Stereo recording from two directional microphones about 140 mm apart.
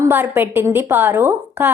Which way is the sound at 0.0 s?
15° right (ahead or behind).